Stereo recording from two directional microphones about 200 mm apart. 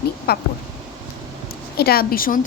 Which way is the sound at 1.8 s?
50° left (ahead or behind).